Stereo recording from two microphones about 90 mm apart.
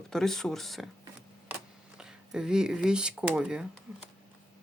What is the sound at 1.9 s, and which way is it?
Speech, 10° right (ahead or behind).